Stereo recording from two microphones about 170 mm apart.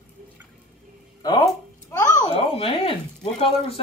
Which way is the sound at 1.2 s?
20° left (ahead or behind).